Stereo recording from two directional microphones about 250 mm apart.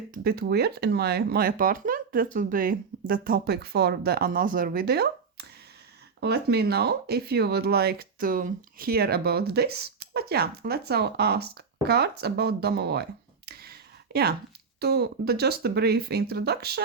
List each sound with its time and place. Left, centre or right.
0.1 s speech: right